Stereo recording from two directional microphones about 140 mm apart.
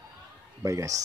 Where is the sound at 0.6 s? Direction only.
20° right (ahead or behind).